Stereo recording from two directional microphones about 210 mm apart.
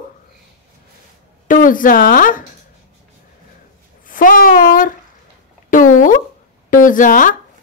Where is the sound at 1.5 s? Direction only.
40° left (ahead or behind).